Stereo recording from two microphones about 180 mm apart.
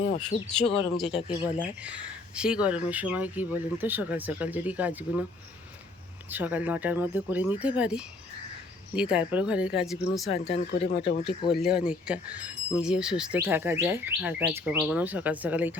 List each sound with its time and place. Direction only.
0.2 s speech: 5° left (ahead or behind)
6.3 s speech: 10° right (ahead or behind)
10.3 s speech: 35° left (ahead or behind)
11.6 s speech: 5° right (ahead or behind)